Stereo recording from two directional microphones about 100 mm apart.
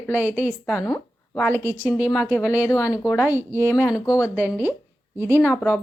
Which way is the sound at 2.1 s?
10° right (ahead or behind).